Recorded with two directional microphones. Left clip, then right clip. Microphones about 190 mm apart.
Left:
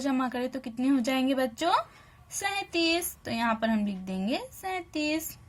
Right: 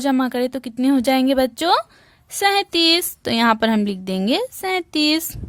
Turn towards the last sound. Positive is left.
turn(degrees=-55)  # may be behind; listen again after turning